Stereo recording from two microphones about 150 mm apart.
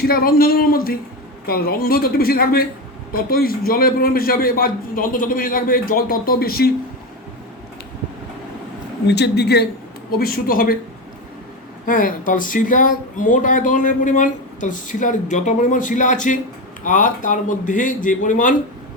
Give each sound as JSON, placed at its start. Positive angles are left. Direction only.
{"t": 0.0, "sound": "a woman's voice", "side_deg": 80}
{"t": 9.0, "sound": "a man's voice", "side_deg": 90}
{"t": 11.9, "sound": "speech", "side_deg": 65}